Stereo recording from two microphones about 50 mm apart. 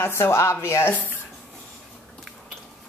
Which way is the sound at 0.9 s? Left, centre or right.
Left.